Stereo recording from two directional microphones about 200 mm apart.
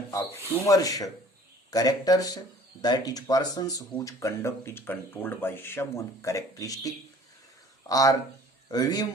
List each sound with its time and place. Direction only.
0.1 s speech: 15° left (ahead or behind)